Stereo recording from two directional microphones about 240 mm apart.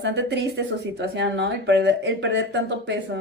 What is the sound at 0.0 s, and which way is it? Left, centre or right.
Speech, right.